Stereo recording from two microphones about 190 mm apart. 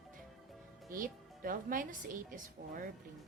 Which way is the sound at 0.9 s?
45° right (ahead or behind).